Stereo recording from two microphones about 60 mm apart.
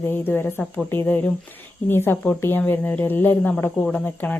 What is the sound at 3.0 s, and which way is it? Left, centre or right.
Speech, left.